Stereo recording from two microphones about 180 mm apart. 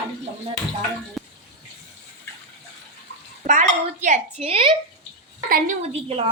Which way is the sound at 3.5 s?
45° right (ahead or behind).